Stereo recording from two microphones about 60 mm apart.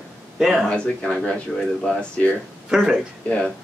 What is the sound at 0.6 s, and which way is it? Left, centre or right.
Speech, centre.